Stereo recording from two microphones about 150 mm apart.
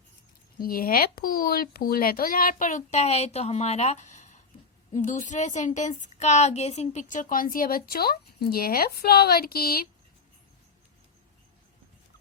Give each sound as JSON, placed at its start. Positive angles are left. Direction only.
{"t": 0.6, "sound": "speech", "side_deg": 75}